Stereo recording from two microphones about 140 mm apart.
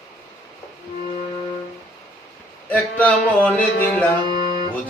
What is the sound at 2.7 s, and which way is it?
Music, 10° left (ahead or behind).